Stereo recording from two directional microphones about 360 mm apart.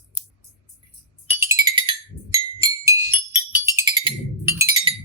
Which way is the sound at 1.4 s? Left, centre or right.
Centre.